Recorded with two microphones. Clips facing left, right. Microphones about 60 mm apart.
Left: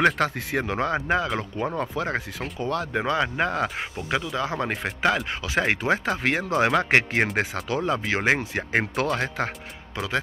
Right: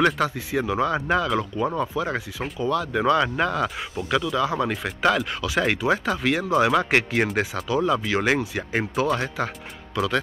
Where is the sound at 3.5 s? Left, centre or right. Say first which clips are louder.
Right 1 dB; left.